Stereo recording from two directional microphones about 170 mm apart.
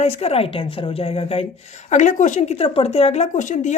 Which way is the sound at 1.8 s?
45° left (ahead or behind).